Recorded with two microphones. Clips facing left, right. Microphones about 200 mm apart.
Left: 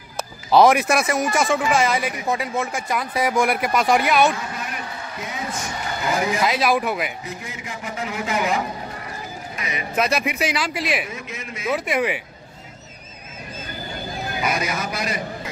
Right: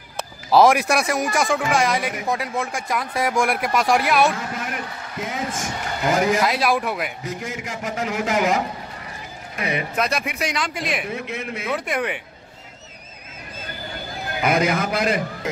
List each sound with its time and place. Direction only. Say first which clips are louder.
0.5 s speech: even; centre (ahead or behind)
5.5 s speech: right 1 dB; 45° right (ahead or behind)
6.4 s speech: left 1 dB; centre (ahead or behind)
7.6 s a man's voice: right 2 dB; 45° right (ahead or behind)
9.6 s speech: right 7 dB; 60° right (ahead or behind)
9.9 s speech: left 2 dB; 5° left (ahead or behind)
11.1 s a man's voice: right 5 dB; 60° right (ahead or behind)
11.7 s speech: left 3 dB; 5° left (ahead or behind)
14.4 s a man's voice: right 6 dB; 55° right (ahead or behind)